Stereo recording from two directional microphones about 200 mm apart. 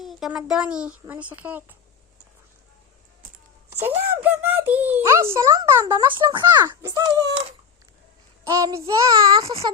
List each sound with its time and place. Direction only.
0.0 s speech: centre (ahead or behind)
3.3 s a sound: 10° right (ahead or behind)
6.1 s a child's voice: 25° right (ahead or behind)
8.4 s child singing: 15° right (ahead or behind)
9.5 s a child's voice: 30° right (ahead or behind)